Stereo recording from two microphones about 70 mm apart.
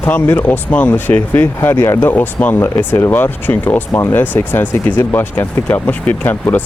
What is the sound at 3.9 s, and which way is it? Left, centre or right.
Speech, left.